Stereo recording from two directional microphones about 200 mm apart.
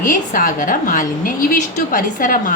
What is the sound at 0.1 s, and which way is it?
A woman's voice, 45° left (ahead or behind).